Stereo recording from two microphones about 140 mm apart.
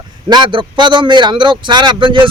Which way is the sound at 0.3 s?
35° right (ahead or behind).